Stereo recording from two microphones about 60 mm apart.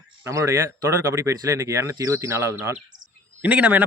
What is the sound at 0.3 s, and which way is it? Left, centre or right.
Speech, right.